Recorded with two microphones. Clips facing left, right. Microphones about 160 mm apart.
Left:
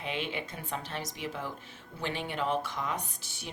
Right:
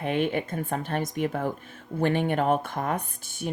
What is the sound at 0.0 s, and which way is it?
Speech, 50° right (ahead or behind).